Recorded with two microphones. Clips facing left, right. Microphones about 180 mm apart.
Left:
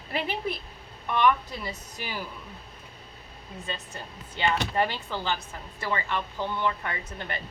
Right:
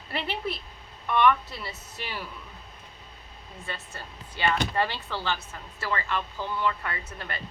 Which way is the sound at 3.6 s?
20° left (ahead or behind).